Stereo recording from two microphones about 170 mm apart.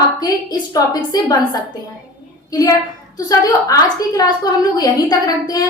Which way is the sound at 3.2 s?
20° left (ahead or behind).